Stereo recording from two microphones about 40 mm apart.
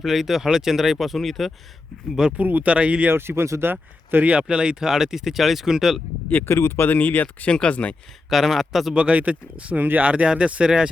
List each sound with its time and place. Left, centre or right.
0.0 s speech: centre
2.4 s speech: right
2.6 s speech: right
3.1 s speech: right
4.2 s speech: right
4.4 s speech: right
6.4 s speech: left
7.5 s speech: left
8.3 s speech: centre
9.0 s speech: right
9.7 s speech: right
10.0 s speech: right